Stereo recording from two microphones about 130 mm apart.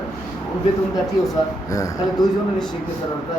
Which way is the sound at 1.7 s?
25° left (ahead or behind).